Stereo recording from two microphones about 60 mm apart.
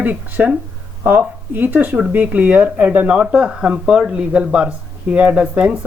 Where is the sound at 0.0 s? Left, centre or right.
Right.